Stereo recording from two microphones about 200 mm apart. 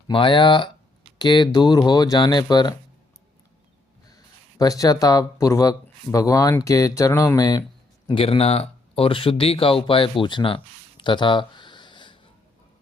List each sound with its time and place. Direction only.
0.1 s speech: 25° left (ahead or behind)
4.1 s speech: 15° left (ahead or behind)